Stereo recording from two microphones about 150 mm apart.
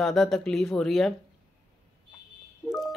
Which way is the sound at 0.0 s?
5° left (ahead or behind).